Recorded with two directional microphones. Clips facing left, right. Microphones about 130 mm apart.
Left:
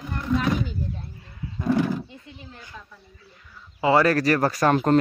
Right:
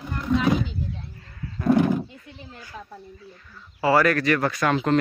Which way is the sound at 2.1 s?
20° left (ahead or behind).